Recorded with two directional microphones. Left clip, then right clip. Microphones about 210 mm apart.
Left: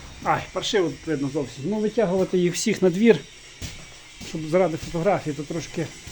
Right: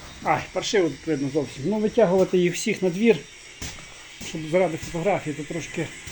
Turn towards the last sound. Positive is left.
turn(degrees=10)  # may be behind; listen again after turning